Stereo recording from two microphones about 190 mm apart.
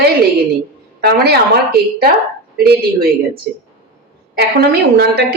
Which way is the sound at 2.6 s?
55° right (ahead or behind).